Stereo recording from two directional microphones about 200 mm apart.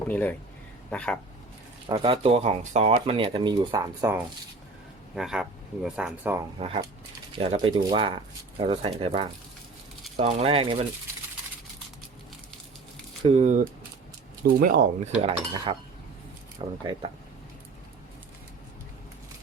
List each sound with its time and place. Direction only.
0.1 s speech: 10° left (ahead or behind)
1.9 s speech: 25° right (ahead or behind)
5.1 s speech: 5° right (ahead or behind)
7.3 s speech: 25° right (ahead or behind)
13.2 s speech: 35° right (ahead or behind)
15.2 s speech: 30° right (ahead or behind)